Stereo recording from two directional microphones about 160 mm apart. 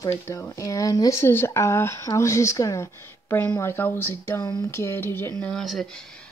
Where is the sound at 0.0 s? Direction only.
15° left (ahead or behind).